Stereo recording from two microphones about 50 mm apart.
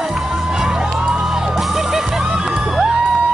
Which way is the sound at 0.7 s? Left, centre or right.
Centre.